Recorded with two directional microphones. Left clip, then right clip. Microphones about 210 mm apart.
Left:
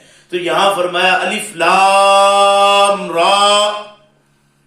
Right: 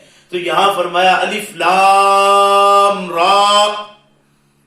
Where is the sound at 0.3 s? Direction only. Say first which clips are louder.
Even; 10° left (ahead or behind).